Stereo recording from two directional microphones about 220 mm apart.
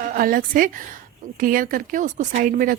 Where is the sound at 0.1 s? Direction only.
40° right (ahead or behind).